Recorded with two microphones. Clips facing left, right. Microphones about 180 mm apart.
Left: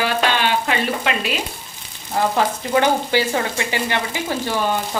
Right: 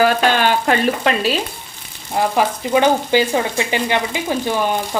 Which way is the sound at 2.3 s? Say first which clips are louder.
Right 4 dB; 15° right (ahead or behind).